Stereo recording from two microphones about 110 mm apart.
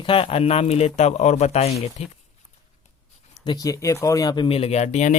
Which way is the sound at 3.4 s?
40° left (ahead or behind).